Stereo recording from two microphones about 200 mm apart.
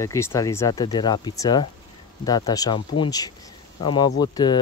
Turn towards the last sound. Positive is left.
turn(degrees=20)  # may be behind; listen again after turning